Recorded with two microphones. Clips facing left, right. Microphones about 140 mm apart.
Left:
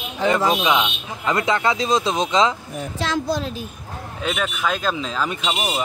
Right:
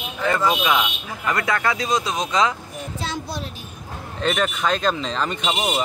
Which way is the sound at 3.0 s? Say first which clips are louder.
Left 7 dB; 90° left.